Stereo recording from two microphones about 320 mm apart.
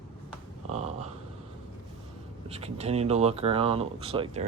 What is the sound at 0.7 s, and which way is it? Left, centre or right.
Speech, centre.